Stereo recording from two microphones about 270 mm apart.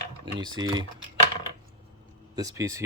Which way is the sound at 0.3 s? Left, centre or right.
Centre.